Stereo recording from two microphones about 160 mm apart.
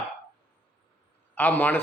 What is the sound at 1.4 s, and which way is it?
Speech, 10° left (ahead or behind).